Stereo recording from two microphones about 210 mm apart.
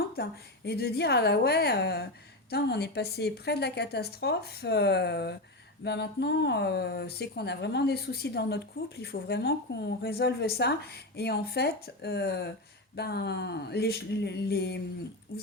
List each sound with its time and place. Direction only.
0.1 s speech: 50° left (ahead or behind)